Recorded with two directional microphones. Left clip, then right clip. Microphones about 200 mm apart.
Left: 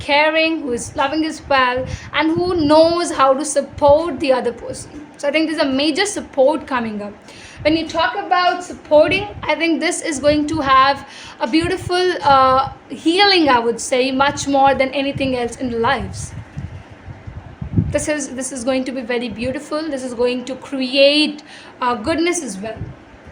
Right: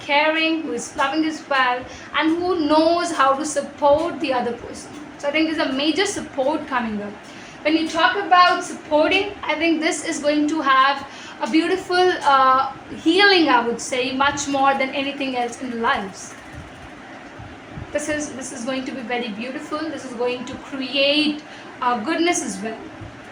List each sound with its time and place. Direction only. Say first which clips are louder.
0.0 s a woman's voice: left 4 dB; 55° left (ahead or behind)
17.9 s a woman's voice: left 3 dB; 55° left (ahead or behind)